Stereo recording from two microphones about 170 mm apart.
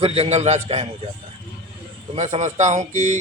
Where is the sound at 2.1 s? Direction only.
45° right (ahead or behind).